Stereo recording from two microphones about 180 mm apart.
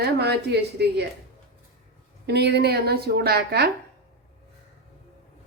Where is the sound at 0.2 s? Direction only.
65° right (ahead or behind).